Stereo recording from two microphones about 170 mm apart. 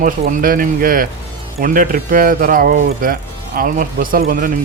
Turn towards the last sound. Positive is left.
turn(degrees=-55)  # may be behind; listen again after turning